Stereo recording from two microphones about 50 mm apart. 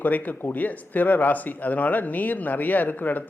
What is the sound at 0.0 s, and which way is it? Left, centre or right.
Speech, left.